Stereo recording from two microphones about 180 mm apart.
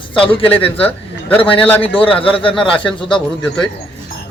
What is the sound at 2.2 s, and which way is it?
Speech, 30° left (ahead or behind).